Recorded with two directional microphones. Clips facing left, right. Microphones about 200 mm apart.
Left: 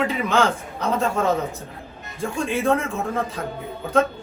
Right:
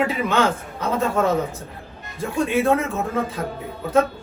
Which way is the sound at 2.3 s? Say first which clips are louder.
Right 3 dB; 5° right (ahead or behind).